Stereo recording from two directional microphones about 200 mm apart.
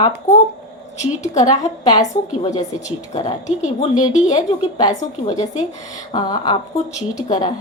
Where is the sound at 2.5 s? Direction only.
35° left (ahead or behind).